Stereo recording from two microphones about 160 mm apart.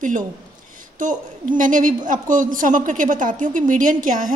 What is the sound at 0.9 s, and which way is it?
A woman's voice, 55° right (ahead or behind).